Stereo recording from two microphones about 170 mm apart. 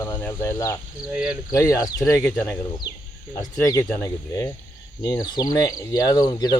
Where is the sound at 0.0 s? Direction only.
15° left (ahead or behind).